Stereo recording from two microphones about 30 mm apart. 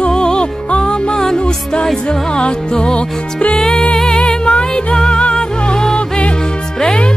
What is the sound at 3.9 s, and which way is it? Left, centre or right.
Music, left.